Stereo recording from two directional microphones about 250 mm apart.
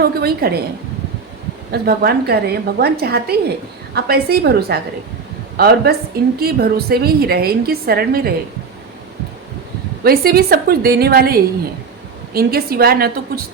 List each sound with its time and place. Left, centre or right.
0.0 s a woman's voice: right
1.7 s a woman's voice: right
10.0 s a woman's voice: right